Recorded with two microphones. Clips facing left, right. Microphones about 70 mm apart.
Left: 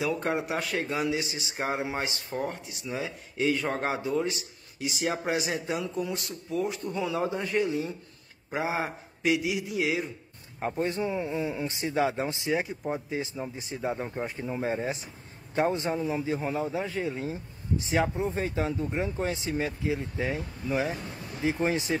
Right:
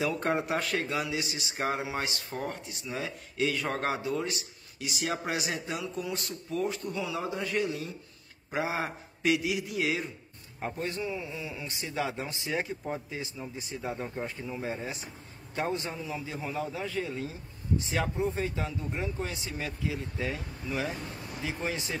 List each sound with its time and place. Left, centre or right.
0.0 s a man's voice: centre
0.8 s speech: left
2.2 s a man's voice: centre
6.9 s a man's voice: left; by 10.0 s centre
10.6 s speech: left
12.5 s a man's voice: centre
13.1 s speech: left